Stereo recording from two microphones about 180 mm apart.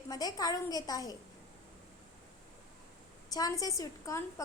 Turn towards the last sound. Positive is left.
turn(degrees=20)  # may be behind; listen again after turning